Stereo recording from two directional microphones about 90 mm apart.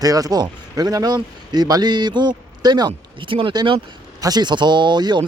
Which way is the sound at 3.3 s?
70° right (ahead or behind).